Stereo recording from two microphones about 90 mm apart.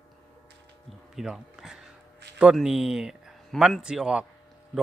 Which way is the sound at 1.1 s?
5° right (ahead or behind).